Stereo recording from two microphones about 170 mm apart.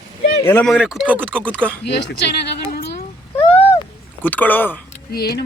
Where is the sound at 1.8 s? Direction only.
80° left.